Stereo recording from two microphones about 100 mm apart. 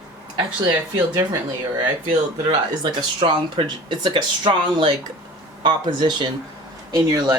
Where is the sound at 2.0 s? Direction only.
50° right (ahead or behind).